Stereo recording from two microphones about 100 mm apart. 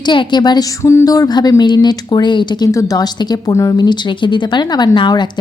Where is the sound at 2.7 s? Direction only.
35° left (ahead or behind).